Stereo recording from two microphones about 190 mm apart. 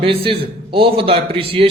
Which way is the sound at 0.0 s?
30° right (ahead or behind).